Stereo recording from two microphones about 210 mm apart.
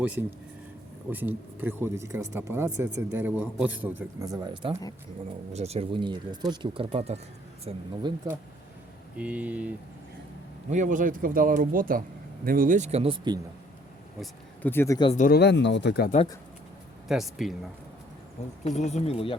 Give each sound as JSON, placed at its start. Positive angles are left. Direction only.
{"t": 0.0, "sound": "speech", "side_deg": -5}
{"t": 9.1, "sound": "speech", "side_deg": -5}
{"t": 10.7, "sound": "speech", "side_deg": -35}
{"t": 14.2, "sound": "speech", "side_deg": 10}
{"t": 15.1, "sound": "speech", "side_deg": 35}
{"t": 15.4, "sound": "speech", "side_deg": 55}
{"t": 17.1, "sound": "speech", "side_deg": 0}
{"t": 18.6, "sound": "speech", "side_deg": 35}